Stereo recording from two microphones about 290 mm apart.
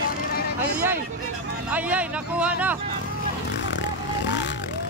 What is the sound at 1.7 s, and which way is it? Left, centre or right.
Speech, centre.